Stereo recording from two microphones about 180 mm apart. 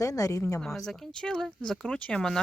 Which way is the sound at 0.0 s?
20° left (ahead or behind).